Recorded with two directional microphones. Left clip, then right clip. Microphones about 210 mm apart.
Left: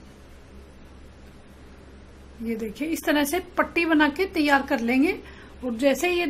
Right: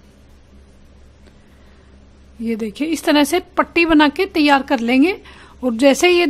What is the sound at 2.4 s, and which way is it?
A woman's voice, 40° right (ahead or behind).